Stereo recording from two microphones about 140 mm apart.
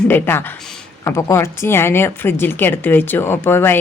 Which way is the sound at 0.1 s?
15° left (ahead or behind).